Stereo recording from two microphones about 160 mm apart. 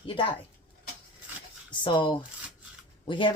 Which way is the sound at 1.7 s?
30° left (ahead or behind).